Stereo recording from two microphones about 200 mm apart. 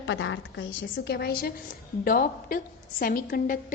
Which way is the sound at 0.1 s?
70° left (ahead or behind).